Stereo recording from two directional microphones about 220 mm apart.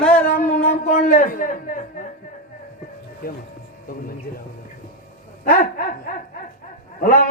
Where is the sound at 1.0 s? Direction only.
40° left (ahead or behind).